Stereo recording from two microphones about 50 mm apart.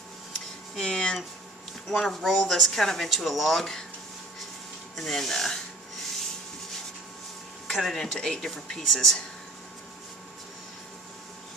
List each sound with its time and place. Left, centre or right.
0.7 s a sound: centre
1.9 s speech: centre
4.9 s speech: centre
7.6 s speech: centre